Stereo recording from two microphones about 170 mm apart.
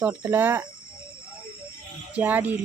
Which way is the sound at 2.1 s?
10° right (ahead or behind).